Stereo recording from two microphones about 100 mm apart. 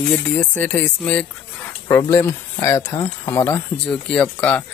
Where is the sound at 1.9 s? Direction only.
25° left (ahead or behind).